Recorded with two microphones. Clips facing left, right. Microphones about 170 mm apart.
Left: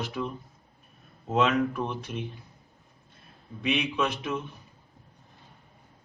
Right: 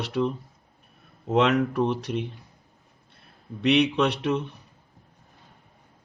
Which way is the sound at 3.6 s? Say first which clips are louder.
Right 7 dB; 70° right (ahead or behind).